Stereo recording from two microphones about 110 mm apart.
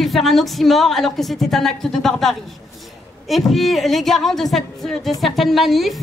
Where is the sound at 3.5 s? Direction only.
Centre (ahead or behind).